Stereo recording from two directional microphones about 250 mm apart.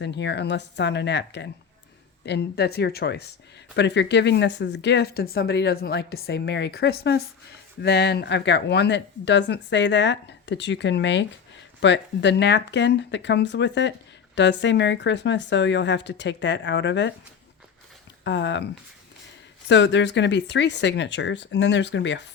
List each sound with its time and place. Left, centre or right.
0.0 s speech: left
18.3 s speech: left